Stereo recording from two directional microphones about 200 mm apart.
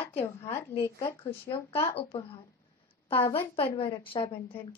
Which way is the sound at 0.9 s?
15° left (ahead or behind).